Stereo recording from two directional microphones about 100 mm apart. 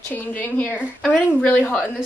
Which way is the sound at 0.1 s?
20° left (ahead or behind).